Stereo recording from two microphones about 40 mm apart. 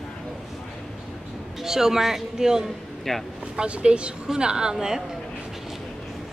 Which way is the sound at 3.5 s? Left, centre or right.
Right.